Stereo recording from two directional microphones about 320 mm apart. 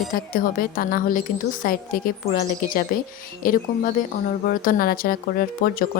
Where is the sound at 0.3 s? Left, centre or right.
Left.